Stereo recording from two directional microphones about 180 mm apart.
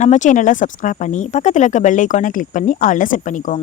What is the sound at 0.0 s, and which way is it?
Speech, 40° left (ahead or behind).